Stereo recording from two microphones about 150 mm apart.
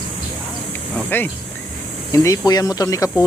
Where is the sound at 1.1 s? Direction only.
15° left (ahead or behind).